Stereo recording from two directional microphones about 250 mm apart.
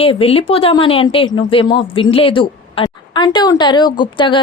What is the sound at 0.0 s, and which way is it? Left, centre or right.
Speech, left.